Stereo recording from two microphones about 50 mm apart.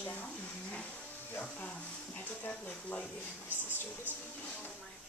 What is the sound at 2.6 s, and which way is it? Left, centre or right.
Speech, left.